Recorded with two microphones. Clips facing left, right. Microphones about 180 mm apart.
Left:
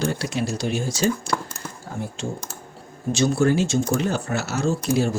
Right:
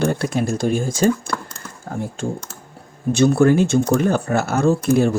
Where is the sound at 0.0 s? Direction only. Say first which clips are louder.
Right 5 dB; 50° right (ahead or behind).